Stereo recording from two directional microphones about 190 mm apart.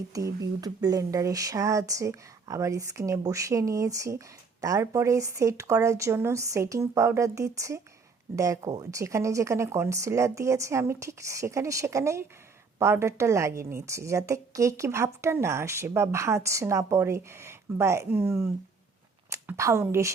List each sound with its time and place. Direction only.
0.1 s a woman's voice: 15° right (ahead or behind)